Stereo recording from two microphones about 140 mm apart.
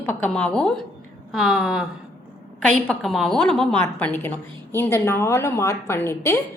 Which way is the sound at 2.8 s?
Centre (ahead or behind).